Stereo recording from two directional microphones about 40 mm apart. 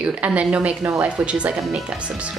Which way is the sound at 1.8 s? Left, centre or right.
Right.